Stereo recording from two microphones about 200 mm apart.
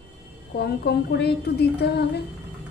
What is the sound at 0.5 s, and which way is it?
Speech, 50° left (ahead or behind).